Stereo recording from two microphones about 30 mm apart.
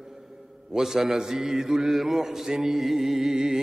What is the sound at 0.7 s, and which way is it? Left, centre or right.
Mantra, centre.